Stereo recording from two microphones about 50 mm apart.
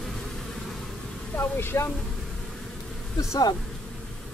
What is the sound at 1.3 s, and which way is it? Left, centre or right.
Speech, left.